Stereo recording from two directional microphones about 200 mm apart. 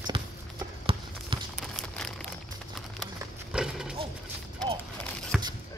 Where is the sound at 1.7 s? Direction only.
5° left (ahead or behind).